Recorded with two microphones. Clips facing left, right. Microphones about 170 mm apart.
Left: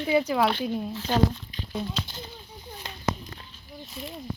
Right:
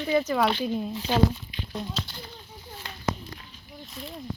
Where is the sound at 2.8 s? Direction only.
20° left (ahead or behind).